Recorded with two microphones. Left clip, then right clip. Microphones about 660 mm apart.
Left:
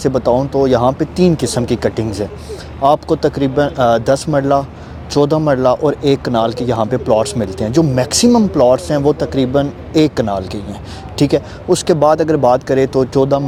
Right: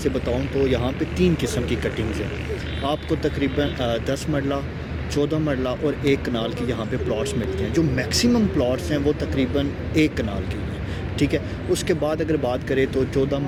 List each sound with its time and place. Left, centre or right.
0.6 s speech: left